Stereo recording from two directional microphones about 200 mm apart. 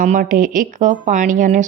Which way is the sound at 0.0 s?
40° right (ahead or behind).